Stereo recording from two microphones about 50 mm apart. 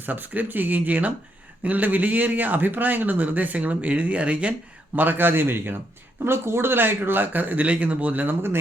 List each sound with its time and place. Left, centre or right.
0.0 s a man's voice: right
4.9 s a man's voice: right
6.2 s a man's voice: right